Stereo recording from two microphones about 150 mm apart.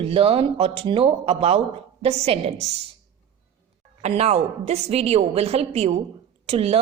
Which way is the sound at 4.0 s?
45° right (ahead or behind).